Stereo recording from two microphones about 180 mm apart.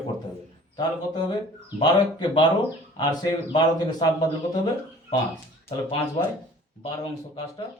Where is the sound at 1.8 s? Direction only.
25° left (ahead or behind).